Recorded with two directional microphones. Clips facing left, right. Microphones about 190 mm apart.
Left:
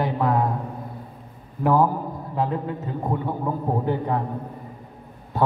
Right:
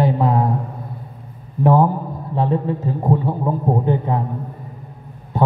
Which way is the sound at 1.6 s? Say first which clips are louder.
Right 4 dB; 25° right (ahead or behind).